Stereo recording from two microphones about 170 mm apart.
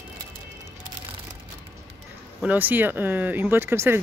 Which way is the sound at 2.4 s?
10° right (ahead or behind).